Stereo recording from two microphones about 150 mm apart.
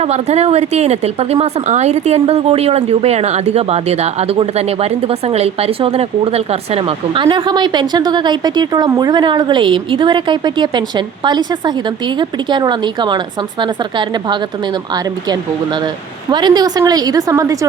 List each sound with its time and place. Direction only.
0.0 s a woman's voice: 45° right (ahead or behind); by 17.7 s 20° right (ahead or behind)